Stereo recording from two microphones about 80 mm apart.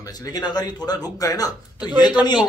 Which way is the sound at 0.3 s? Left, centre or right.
Left.